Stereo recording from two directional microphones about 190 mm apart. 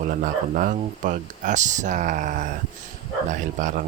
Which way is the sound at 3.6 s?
45° right (ahead or behind).